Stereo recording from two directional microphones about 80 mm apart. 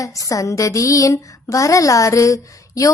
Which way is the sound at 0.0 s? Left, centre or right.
Left.